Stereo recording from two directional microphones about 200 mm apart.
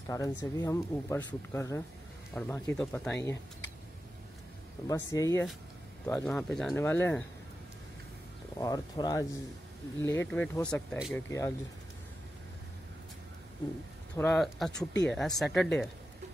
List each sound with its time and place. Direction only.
0.1 s speech: 15° left (ahead or behind)
4.8 s speech: 15° left (ahead or behind)
8.5 s speech: 20° left (ahead or behind); by 11.2 s centre (ahead or behind)
11.2 s speech: 15° left (ahead or behind)
14.1 s speech: 5° left (ahead or behind)